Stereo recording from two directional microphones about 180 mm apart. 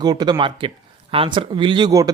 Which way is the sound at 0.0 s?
20° right (ahead or behind).